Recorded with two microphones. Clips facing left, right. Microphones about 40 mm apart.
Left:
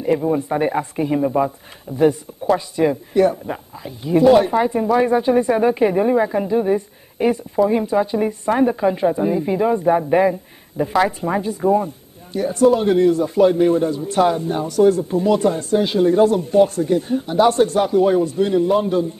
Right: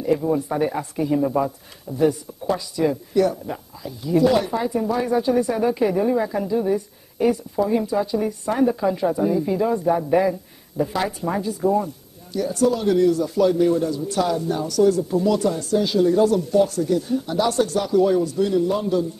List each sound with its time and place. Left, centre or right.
0.0 s speech: left
1.2 s speech: left